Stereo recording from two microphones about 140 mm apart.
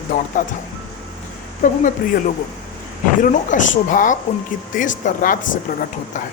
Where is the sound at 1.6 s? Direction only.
70° left (ahead or behind).